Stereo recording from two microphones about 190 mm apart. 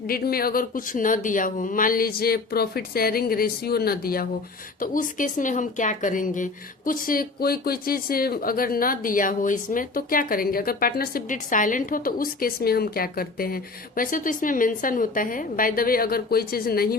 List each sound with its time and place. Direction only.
0.1 s speech: 50° left (ahead or behind)